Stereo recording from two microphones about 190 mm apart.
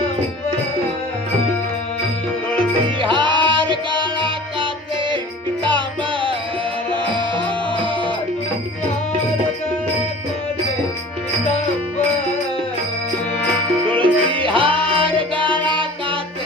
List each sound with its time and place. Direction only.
2.8 s music: 25° right (ahead or behind)
7.3 s music: 25° right (ahead or behind)
14.0 s music: 25° right (ahead or behind)
15.4 s music: 10° left (ahead or behind)
15.7 s music: 25° right (ahead or behind)